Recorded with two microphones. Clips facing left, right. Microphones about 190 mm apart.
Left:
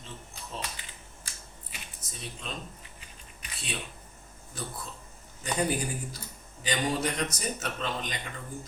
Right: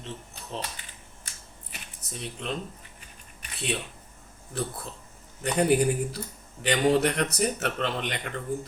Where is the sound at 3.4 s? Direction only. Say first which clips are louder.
Right 9 dB; 65° right (ahead or behind).